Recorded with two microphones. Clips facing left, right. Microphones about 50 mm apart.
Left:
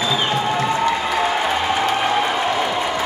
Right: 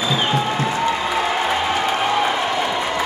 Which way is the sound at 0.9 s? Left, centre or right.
Centre.